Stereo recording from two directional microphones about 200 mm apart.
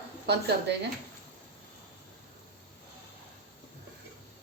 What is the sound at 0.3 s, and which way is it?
Speech, 55° right (ahead or behind).